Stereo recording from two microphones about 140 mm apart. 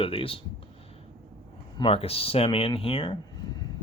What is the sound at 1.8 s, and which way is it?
Speech, 40° left (ahead or behind).